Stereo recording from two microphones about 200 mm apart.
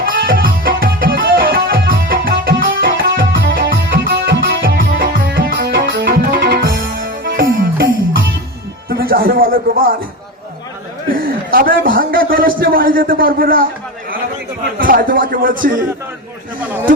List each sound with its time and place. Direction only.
0.0 s music: 45° right (ahead or behind)
8.9 s speech: 50° right (ahead or behind)
11.5 s a man's voice: 45° right (ahead or behind)
14.8 s a man's voice: 45° right (ahead or behind)